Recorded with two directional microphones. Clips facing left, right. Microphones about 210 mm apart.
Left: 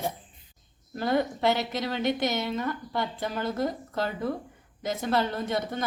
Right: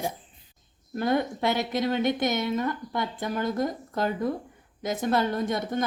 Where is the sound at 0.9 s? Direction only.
50° right (ahead or behind).